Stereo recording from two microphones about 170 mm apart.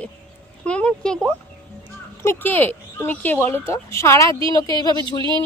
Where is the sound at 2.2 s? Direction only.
15° left (ahead or behind).